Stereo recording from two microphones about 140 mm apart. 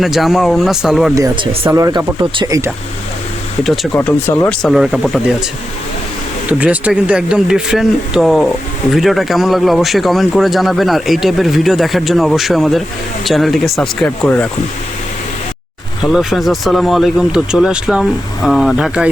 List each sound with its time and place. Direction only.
0.0 s speech: centre (ahead or behind)
1.6 s speech: 25° right (ahead or behind)
3.9 s speech: 15° left (ahead or behind)
4.4 s speech: centre (ahead or behind)
6.5 s speech: 10° right (ahead or behind); by 14.5 s 10° left (ahead or behind)
16.1 s speech: centre (ahead or behind)